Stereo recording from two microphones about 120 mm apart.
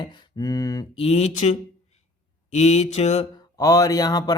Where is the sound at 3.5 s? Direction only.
30° left (ahead or behind).